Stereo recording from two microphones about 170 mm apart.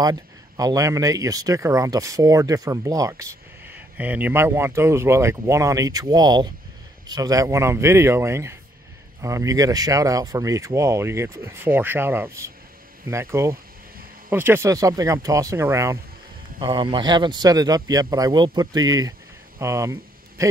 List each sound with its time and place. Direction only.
0.0 s speech: 20° right (ahead or behind)
16.5 s speech: 30° right (ahead or behind)
19.6 s a sound: 15° right (ahead or behind)